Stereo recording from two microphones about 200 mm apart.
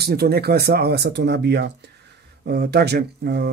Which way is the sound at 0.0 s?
50° right (ahead or behind).